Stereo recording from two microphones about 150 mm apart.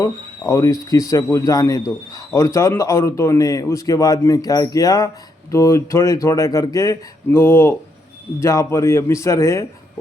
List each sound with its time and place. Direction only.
0.0 s speech: 20° left (ahead or behind)